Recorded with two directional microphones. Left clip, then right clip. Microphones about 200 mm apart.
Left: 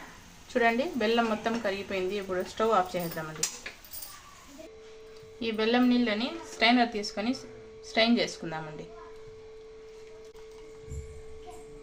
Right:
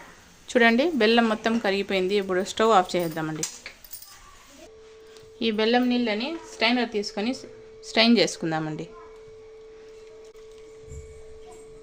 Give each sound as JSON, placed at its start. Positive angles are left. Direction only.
{"t": 0.4, "sound": "a woman's voice", "side_deg": -55}
{"t": 5.4, "sound": "a woman's voice", "side_deg": -50}